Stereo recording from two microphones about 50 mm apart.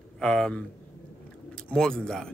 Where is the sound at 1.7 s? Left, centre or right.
Centre.